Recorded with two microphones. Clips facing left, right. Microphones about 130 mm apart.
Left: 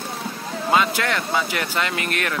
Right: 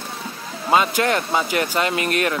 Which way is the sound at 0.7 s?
25° right (ahead or behind).